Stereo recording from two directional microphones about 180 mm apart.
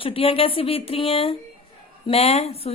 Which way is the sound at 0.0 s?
30° left (ahead or behind).